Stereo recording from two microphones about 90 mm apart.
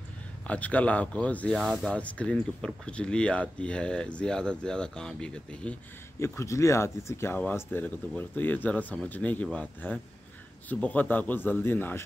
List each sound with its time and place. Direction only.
0.5 s speech: 15° left (ahead or behind)
1.5 s speech: centre (ahead or behind)
1.9 s speech: 15° left (ahead or behind)
6.1 s speech: 30° left (ahead or behind)